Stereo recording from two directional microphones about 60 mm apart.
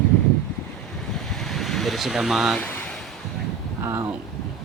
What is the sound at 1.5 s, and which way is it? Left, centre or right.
Speech, centre.